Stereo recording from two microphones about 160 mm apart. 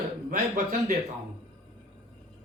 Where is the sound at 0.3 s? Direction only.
55° right (ahead or behind).